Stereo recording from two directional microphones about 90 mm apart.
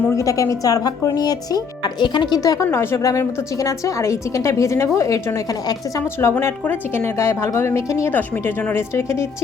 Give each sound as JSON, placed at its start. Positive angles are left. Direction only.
{"t": 0.0, "sound": "speech", "side_deg": 35}
{"t": 2.6, "sound": "a woman's voice", "side_deg": 30}